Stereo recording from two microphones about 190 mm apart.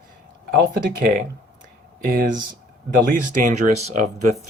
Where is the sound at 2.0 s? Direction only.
50° right (ahead or behind).